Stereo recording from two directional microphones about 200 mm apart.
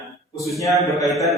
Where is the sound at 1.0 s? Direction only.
Centre (ahead or behind).